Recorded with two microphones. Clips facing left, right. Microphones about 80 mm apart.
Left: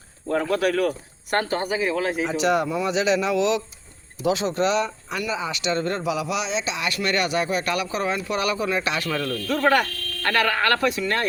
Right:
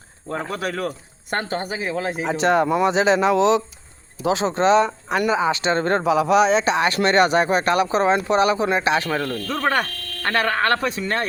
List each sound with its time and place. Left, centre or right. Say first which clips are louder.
0.5 s speech: left 5 dB; right